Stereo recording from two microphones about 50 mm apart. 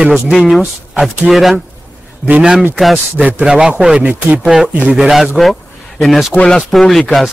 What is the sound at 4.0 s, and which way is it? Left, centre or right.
Speech, right.